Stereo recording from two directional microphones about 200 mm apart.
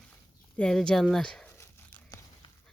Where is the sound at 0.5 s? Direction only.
5° left (ahead or behind).